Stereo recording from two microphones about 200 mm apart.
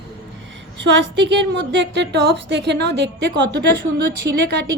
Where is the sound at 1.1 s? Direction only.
60° right (ahead or behind).